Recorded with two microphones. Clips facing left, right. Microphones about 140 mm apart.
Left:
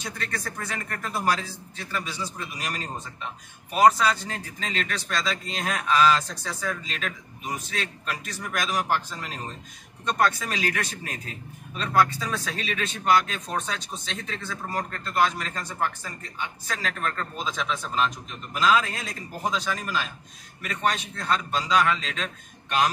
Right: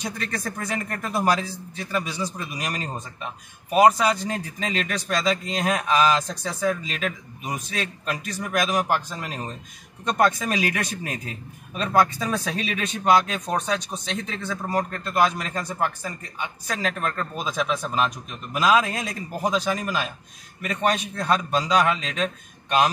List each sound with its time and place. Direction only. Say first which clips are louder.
0.0 s speech: right 4 dB; 20° right (ahead or behind)
21.2 s speech: right 3 dB; 15° right (ahead or behind)